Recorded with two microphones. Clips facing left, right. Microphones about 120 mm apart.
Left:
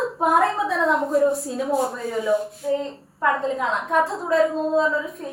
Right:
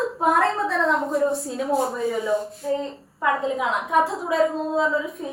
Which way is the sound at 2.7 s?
5° right (ahead or behind).